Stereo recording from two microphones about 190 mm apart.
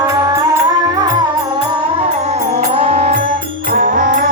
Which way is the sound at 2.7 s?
35° right (ahead or behind).